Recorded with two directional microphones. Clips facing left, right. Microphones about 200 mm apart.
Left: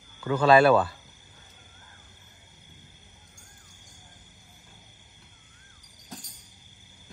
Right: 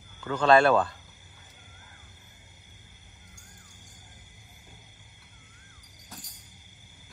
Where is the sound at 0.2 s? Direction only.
10° left (ahead or behind).